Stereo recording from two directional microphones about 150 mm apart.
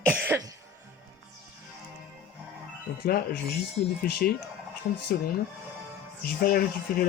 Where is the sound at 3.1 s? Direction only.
90° left.